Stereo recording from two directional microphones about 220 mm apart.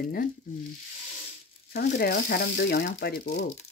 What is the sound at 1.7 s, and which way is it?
Speech, 45° left (ahead or behind).